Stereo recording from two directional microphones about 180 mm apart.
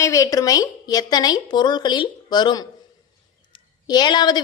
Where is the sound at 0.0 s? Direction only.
15° left (ahead or behind).